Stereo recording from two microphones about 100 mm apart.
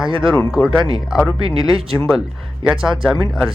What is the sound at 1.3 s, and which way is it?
Speech, 65° right (ahead or behind).